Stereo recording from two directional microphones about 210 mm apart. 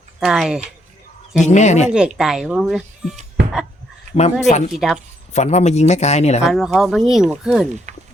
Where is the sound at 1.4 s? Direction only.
35° left (ahead or behind).